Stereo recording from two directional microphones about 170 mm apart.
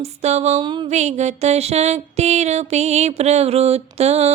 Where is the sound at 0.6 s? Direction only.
30° right (ahead or behind).